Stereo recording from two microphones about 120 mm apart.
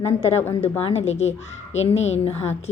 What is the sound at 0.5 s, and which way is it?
A woman's voice, 60° left (ahead or behind).